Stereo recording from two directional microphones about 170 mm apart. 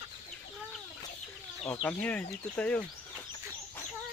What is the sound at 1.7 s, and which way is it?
Speech, 5° left (ahead or behind).